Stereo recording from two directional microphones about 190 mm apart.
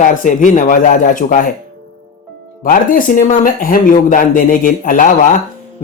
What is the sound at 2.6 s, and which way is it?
Speech, 45° left (ahead or behind).